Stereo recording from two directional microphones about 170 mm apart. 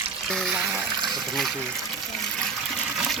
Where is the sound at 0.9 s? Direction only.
25° right (ahead or behind).